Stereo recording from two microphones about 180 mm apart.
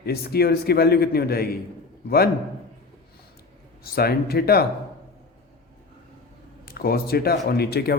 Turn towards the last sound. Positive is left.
turn(degrees=60)  # may be behind; listen again after turning